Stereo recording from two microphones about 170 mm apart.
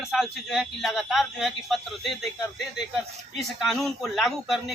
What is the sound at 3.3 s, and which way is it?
Speech, centre (ahead or behind).